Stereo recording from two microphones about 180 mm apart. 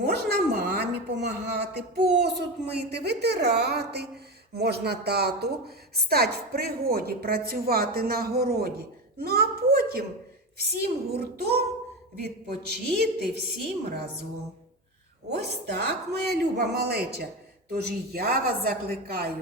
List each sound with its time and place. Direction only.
0.0 s a woman's voice: 65° right (ahead or behind)
15.3 s a woman's voice: 65° right (ahead or behind)